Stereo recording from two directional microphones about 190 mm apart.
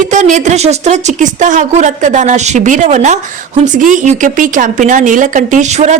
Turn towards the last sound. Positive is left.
turn(degrees=-35)  # may be behind; listen again after turning